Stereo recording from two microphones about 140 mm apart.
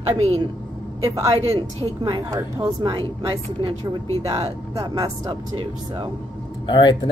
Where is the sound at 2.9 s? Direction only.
35° right (ahead or behind).